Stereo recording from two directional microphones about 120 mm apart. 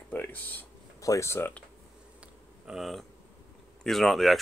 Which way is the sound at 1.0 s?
25° left (ahead or behind).